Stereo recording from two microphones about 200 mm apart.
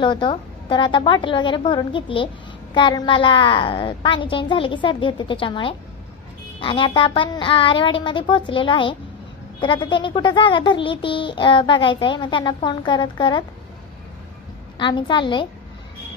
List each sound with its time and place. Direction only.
0.0 s a child's voice: 25° left (ahead or behind)
14.8 s a child's voice: 25° left (ahead or behind)